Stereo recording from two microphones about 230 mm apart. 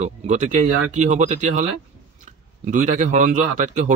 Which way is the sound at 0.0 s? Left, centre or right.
Right.